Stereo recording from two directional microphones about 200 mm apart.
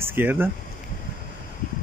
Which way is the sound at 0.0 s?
10° right (ahead or behind).